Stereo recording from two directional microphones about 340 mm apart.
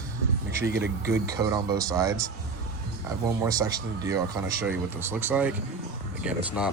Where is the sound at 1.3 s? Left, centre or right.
Centre.